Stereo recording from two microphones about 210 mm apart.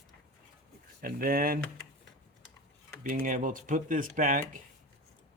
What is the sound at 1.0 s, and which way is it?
Speech, 45° right (ahead or behind).